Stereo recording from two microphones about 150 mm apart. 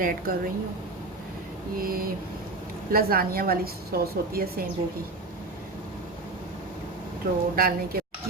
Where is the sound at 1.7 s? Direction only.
75° right (ahead or behind).